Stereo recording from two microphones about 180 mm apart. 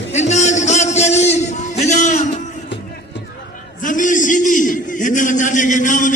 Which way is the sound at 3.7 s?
45° left (ahead or behind).